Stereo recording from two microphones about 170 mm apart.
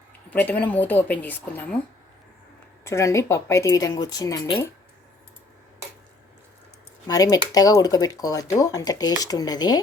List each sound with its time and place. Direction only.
0.3 s speech: 10° left (ahead or behind)
2.8 s speech: 15° left (ahead or behind)
7.1 s speech: 20° left (ahead or behind)